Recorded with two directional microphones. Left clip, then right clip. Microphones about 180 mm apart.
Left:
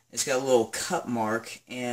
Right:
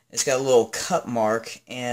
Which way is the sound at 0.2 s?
45° right (ahead or behind).